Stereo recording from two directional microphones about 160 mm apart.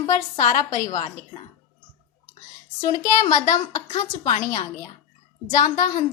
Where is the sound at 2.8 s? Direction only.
25° left (ahead or behind).